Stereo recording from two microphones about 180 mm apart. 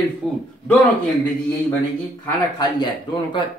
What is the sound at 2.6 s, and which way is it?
Speech, 25° left (ahead or behind).